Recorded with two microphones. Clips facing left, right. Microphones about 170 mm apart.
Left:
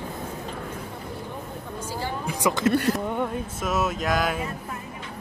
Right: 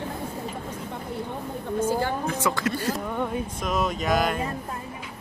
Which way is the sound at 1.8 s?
55° right (ahead or behind).